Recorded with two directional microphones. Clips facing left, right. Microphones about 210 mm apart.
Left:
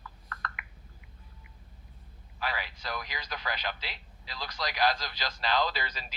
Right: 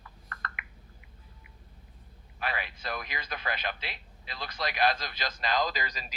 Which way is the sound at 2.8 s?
20° right (ahead or behind).